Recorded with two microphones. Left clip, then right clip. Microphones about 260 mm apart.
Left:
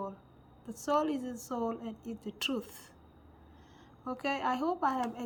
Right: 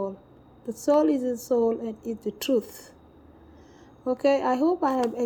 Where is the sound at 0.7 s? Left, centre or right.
Centre.